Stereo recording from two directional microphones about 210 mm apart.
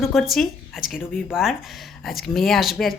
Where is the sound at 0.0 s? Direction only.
Centre (ahead or behind).